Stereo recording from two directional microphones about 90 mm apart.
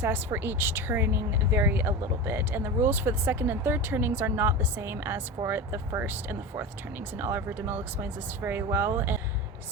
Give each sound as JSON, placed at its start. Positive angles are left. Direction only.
{"t": 0.0, "sound": "a woman's voice", "side_deg": -25}
{"t": 7.2, "sound": "a woman's voice", "side_deg": -25}